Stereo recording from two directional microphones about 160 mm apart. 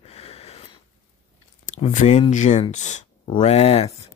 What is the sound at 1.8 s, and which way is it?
Speech, 50° left (ahead or behind).